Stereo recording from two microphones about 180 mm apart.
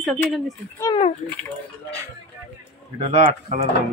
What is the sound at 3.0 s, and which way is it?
Speech, 40° right (ahead or behind).